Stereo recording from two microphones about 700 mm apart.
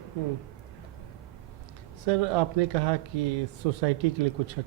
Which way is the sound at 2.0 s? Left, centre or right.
Right.